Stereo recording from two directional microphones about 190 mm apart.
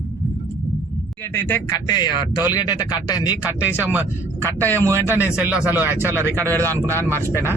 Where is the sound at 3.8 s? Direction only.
10° right (ahead or behind).